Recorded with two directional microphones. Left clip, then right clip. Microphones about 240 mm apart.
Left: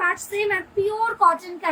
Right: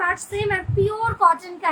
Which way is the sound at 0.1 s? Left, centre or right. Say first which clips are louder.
Even; centre.